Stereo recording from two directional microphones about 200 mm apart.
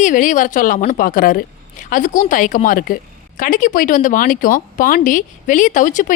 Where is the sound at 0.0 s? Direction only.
40° left (ahead or behind).